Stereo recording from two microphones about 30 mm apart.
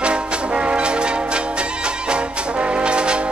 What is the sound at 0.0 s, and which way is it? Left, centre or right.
Music, right.